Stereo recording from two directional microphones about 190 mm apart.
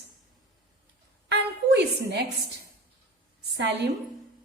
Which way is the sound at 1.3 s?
60° right (ahead or behind).